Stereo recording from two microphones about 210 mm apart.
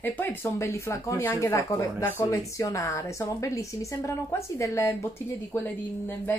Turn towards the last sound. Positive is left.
turn(degrees=10)  # may be behind; listen again after turning